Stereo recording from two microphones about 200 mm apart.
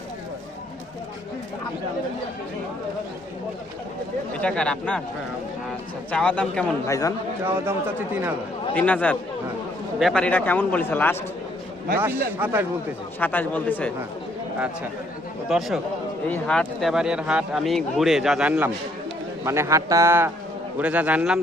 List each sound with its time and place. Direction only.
4.4 s speech: 5° left (ahead or behind)
6.1 s speech: 5° left (ahead or behind)
6.8 s a man's voice: 15° left (ahead or behind)
8.7 s a man's voice: 5° left (ahead or behind)
11.9 s a man's voice: 10° right (ahead or behind)
13.1 s a man's voice: 10° left (ahead or behind)
15.4 s a man's voice: centre (ahead or behind)